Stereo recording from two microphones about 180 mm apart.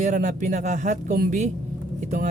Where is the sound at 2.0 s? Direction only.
40° right (ahead or behind).